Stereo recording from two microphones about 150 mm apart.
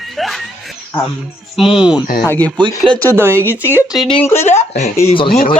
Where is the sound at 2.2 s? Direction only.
10° left (ahead or behind).